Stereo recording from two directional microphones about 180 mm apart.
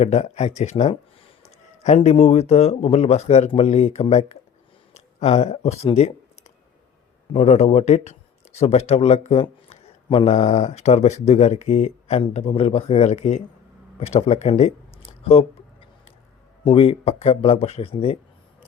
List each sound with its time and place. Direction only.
0.0 s speech: 35° left (ahead or behind)
7.3 s speech: 35° left (ahead or behind)
16.6 s speech: 30° left (ahead or behind)